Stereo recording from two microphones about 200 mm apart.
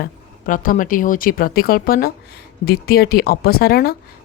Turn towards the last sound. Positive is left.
turn(degrees=50)  # may be behind; listen again after turning